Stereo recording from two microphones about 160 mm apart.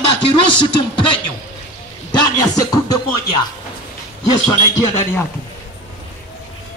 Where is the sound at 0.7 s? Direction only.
30° left (ahead or behind).